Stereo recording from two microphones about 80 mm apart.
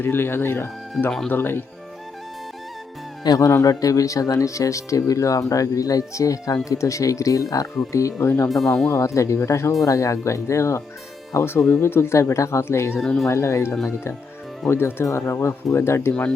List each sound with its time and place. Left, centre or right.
0.0 s speech: left
3.2 s speech: left
8.4 s speech: centre
8.9 s speech: left
13.0 s speech: centre
13.2 s speech: left